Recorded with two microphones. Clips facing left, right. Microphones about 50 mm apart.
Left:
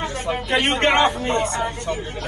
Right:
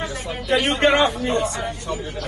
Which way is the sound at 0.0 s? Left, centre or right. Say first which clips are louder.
Left 3 dB; left.